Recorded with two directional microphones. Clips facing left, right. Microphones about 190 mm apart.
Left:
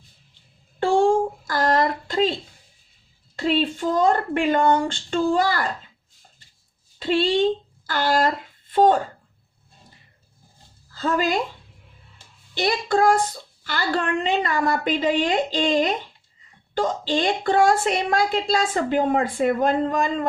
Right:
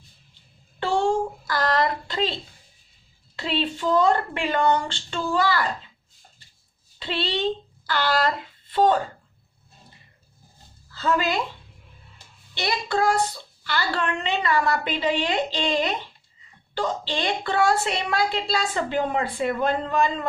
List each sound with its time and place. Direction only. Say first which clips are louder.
0.8 s a sound: left 4 dB; 45° left (ahead or behind)
3.3 s a woman's voice: left 5 dB; 45° left (ahead or behind)
7.0 s speech: left 7 dB; 45° left (ahead or behind)
10.9 s a woman's voice: left 2 dB; 45° left (ahead or behind)
12.5 s a woman's voice: left 4 dB; 45° left (ahead or behind)